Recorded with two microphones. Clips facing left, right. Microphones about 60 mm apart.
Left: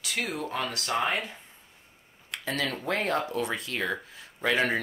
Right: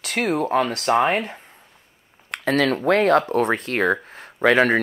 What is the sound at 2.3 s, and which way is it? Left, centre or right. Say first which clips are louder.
Speech: right 11 dB; right.